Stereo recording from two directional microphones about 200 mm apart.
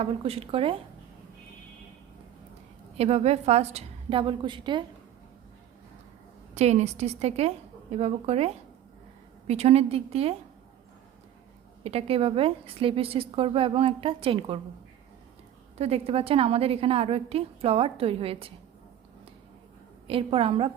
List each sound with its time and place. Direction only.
0.0 s a woman's voice: 30° right (ahead or behind)
3.0 s a woman's voice: 30° right (ahead or behind)
6.5 s a woman's voice: 35° right (ahead or behind)
11.8 s a woman's voice: 30° right (ahead or behind)
15.8 s a woman's voice: 30° right (ahead or behind)
20.1 s a woman's voice: 30° right (ahead or behind)